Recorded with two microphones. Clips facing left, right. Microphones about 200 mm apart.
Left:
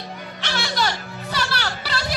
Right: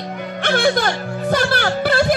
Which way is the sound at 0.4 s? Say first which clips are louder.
Right 9 dB; 55° right (ahead or behind).